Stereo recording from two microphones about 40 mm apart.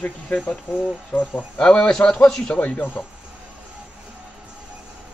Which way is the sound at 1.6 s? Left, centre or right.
Left.